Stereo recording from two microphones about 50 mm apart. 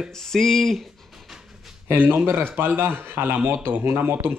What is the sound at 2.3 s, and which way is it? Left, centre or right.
Speech, right.